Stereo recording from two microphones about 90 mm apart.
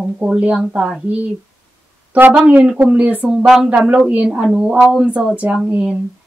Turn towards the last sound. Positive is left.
turn(degrees=-10)  # may be behind; listen again after turning